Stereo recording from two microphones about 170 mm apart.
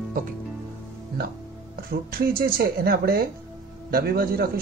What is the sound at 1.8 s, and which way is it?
Speech, 60° right (ahead or behind).